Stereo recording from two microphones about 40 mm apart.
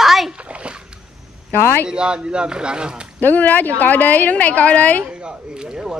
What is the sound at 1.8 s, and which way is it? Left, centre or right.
Speech, right.